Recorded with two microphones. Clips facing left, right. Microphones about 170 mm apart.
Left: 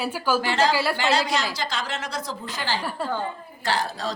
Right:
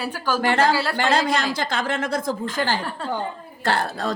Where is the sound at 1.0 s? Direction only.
55° right (ahead or behind).